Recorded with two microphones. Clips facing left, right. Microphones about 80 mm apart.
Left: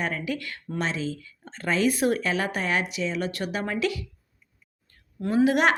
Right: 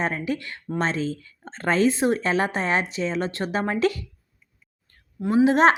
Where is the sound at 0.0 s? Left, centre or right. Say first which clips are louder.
Right 3 dB; right.